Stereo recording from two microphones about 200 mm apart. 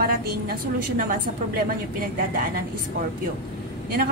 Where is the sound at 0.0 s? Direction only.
50° right (ahead or behind).